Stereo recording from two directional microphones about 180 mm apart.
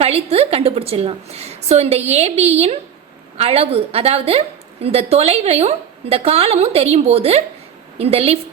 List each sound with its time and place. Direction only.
0.0 s a woman's voice: 35° right (ahead or behind)